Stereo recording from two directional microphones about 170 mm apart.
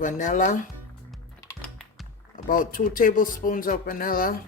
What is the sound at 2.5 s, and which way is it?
Speech, 55° left (ahead or behind).